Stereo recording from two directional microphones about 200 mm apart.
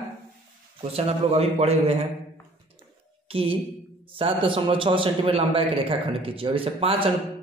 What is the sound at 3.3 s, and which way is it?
A man's voice, 25° right (ahead or behind).